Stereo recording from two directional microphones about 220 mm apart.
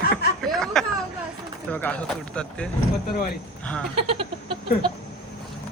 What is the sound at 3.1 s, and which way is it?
Speech, 45° left (ahead or behind).